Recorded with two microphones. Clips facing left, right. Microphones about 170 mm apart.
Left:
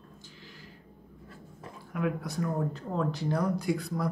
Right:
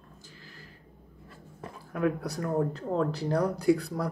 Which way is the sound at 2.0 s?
35° right (ahead or behind).